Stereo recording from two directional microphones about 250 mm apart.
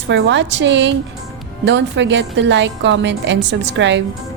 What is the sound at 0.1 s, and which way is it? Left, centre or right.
Speech, right.